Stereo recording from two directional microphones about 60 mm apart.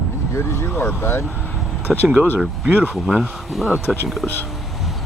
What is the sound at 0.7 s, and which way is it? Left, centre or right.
Speech, left.